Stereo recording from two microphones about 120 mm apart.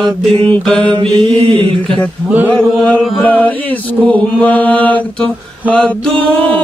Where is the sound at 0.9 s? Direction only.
45° right (ahead or behind).